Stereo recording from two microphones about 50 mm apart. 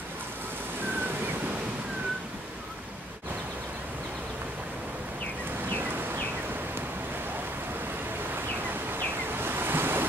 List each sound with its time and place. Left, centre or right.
9.4 s waves: right